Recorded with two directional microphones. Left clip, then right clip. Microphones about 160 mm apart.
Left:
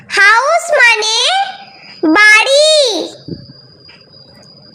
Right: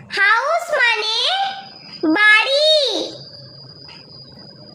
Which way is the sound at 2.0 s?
45° left (ahead or behind).